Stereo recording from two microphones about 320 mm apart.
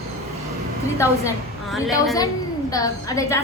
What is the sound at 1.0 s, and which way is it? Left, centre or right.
A woman's voice, centre.